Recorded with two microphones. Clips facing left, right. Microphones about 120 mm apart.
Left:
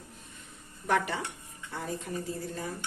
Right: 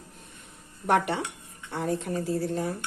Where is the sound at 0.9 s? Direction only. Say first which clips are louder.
Right 4 dB; 65° right (ahead or behind).